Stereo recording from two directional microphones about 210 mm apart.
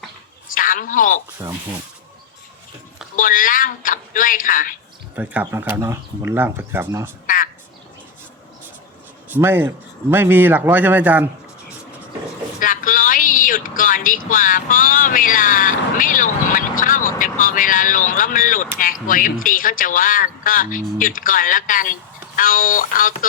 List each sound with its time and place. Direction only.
0.5 s a man's voice: 40° left (ahead or behind)
1.4 s speech: 15° right (ahead or behind)
3.2 s speech: 40° left (ahead or behind)
5.1 s speech: 5° right (ahead or behind)
9.3 s speech: 10° right (ahead or behind)
12.5 s a sound: 40° left (ahead or behind)
14.3 s speech: 40° left (ahead or behind)